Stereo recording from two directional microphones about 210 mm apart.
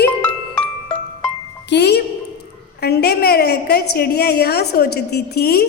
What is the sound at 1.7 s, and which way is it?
A woman's voice, 55° left (ahead or behind).